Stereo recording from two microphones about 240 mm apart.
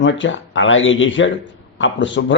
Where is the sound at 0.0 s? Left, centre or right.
Left.